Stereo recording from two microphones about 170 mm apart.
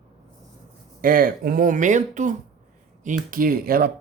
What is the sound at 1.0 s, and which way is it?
Speech, 60° right (ahead or behind).